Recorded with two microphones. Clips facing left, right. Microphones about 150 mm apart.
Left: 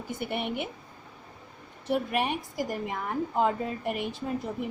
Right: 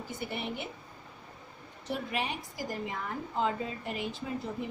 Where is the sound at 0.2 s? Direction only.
60° left (ahead or behind).